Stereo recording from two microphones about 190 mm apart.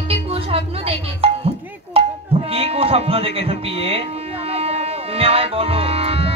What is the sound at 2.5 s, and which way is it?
Speech, 30° right (ahead or behind).